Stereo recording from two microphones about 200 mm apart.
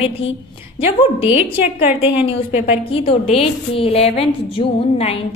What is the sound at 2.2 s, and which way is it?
A woman's voice, 35° left (ahead or behind).